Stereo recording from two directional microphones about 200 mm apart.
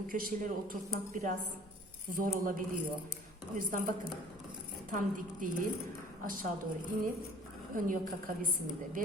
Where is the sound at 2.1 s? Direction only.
45° right (ahead or behind).